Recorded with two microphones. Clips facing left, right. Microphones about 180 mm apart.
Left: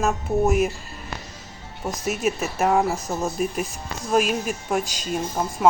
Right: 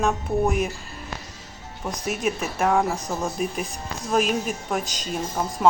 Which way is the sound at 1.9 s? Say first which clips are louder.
Left 2 dB; 5° left (ahead or behind).